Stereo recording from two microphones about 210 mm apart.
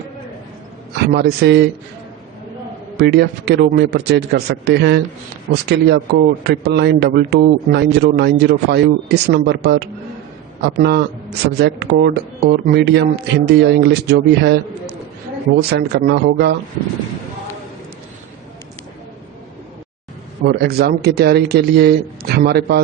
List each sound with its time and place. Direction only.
0.9 s speech: 50° right (ahead or behind)
3.0 s speech: 50° right (ahead or behind)
20.4 s speech: 45° right (ahead or behind)